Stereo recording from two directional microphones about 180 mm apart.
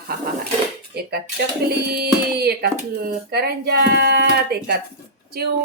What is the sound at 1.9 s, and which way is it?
Speech, 60° right (ahead or behind).